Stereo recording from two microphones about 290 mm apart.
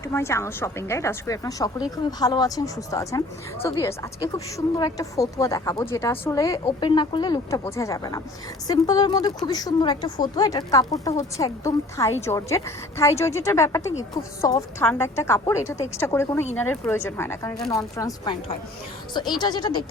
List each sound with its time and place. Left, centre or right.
0.1 s speech: centre